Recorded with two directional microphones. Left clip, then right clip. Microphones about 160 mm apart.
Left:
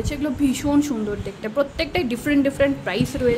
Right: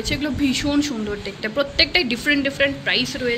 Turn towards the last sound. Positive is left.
turn(degrees=35)  # may be behind; listen again after turning